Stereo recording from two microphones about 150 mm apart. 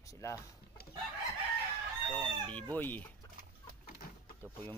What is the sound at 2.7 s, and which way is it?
Speech, 10° left (ahead or behind).